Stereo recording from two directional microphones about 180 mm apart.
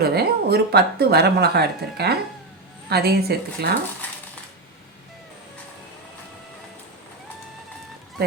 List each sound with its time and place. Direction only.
0.0 s a woman's voice: 60° right (ahead or behind)